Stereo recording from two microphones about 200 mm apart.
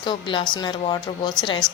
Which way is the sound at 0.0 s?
25° left (ahead or behind).